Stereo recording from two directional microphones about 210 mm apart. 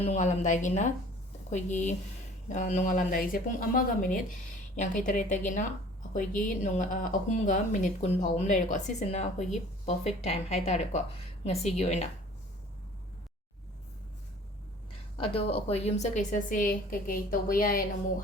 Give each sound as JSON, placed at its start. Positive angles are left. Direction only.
{"t": 0.0, "sound": "speech", "side_deg": 35}
{"t": 15.2, "sound": "speech", "side_deg": 25}